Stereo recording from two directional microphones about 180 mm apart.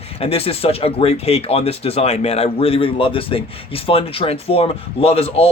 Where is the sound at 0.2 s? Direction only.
35° left (ahead or behind).